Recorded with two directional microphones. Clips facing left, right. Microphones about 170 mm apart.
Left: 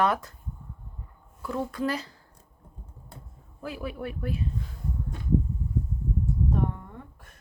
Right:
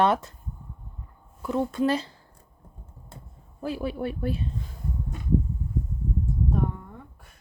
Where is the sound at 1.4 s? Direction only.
20° right (ahead or behind).